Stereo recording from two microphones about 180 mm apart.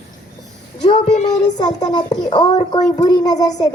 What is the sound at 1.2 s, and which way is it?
A child's voice, 20° left (ahead or behind).